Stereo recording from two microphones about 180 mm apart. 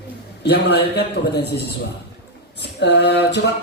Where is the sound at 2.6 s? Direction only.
70° left (ahead or behind).